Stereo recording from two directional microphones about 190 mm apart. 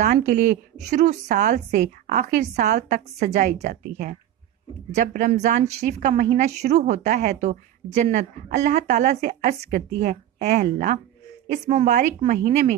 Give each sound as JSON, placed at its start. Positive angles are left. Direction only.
{"t": 0.0, "sound": "a woman's voice", "side_deg": -40}